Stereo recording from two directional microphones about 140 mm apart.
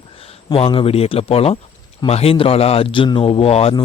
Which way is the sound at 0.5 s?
40° left (ahead or behind).